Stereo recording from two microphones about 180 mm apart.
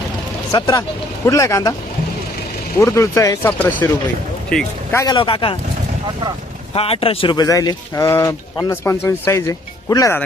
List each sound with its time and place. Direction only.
0.5 s speech: 20° left (ahead or behind)
2.7 s speech: 15° left (ahead or behind)
4.4 s a sound: 5° left (ahead or behind)
4.9 s speech: 25° left (ahead or behind)
6.7 s speech: 30° left (ahead or behind); by 10.2 s 15° left (ahead or behind)